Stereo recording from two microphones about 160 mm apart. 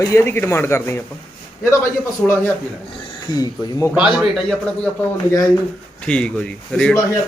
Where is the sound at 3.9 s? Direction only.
5° right (ahead or behind).